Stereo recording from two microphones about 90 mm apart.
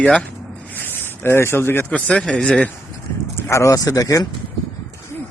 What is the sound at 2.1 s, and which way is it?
Speech, 10° left (ahead or behind).